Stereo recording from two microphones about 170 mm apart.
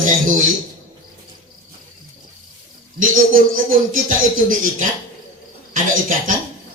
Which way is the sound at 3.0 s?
50° right (ahead or behind).